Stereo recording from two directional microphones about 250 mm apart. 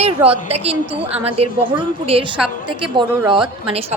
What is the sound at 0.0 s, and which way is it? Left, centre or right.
A woman's voice, right.